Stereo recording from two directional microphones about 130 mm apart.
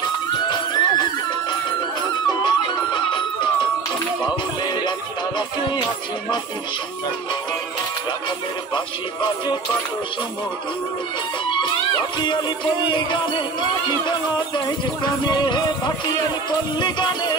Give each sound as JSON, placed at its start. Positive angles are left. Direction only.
{"t": 0.5, "sound": "music", "side_deg": 35}
{"t": 2.2, "sound": "music", "side_deg": 35}
{"t": 8.7, "sound": "music", "side_deg": 35}
{"t": 12.2, "sound": "music", "side_deg": 35}
{"t": 15.2, "sound": "music", "side_deg": 35}
{"t": 16.8, "sound": "music", "side_deg": 35}